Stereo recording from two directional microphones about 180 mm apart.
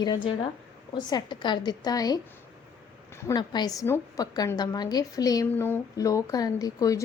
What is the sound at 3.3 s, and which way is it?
A woman's voice, 25° left (ahead or behind).